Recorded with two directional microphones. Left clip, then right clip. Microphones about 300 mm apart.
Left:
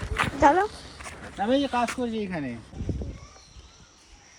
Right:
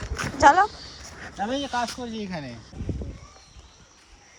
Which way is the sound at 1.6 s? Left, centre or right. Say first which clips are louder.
Left 1 dB; left.